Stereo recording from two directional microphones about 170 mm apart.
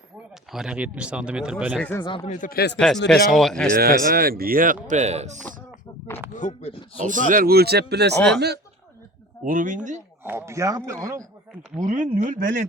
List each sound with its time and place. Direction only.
0.5 s speech: 5° right (ahead or behind)
1.8 s speech: 10° left (ahead or behind)
2.0 s speech: 30° left (ahead or behind)
2.3 s speech: 55° left (ahead or behind)
2.7 s speech: 5° left (ahead or behind)
3.8 s speech: 60° right (ahead or behind); by 5.4 s 40° right (ahead or behind)
6.3 s speech: 45° left (ahead or behind)
7.0 s speech: 50° right (ahead or behind); by 8.5 s 80° right
9.4 s speech: 50° right (ahead or behind)
10.2 s speech: 15° right (ahead or behind)
11.8 s speech: 50° right (ahead or behind)